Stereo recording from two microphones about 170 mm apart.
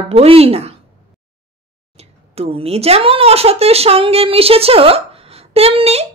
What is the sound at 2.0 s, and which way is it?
Speech, 35° right (ahead or behind).